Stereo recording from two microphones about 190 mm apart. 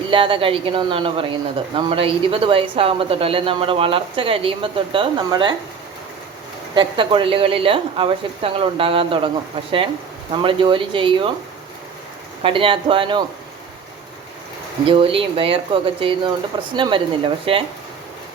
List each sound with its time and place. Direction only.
0.1 s speech: 25° right (ahead or behind)
6.7 s speech: 25° right (ahead or behind)
10.3 s speech: 25° right (ahead or behind)
12.4 s speech: 25° right (ahead or behind)
14.8 s speech: 30° right (ahead or behind)